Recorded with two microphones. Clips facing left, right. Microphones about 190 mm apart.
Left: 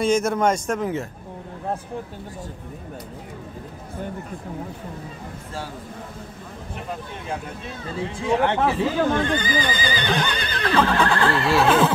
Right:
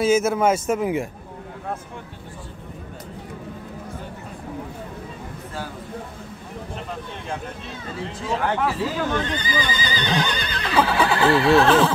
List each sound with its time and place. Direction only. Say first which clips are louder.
0.0 s neigh: right 1 dB; 5° right (ahead or behind)
8.5 s speech: left 2 dB; 25° left (ahead or behind)
9.2 s speech: left 3 dB; 50° left (ahead or behind)
10.7 s neigh: even; 5° right (ahead or behind)